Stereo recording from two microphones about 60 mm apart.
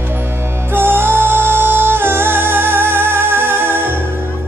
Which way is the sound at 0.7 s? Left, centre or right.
Right.